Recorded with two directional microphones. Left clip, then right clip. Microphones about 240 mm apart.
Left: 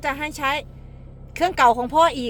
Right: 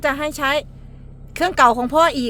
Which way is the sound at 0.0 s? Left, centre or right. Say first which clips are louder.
Right 4 dB; right.